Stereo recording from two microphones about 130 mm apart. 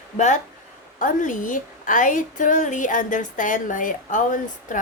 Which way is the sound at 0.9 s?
90° left.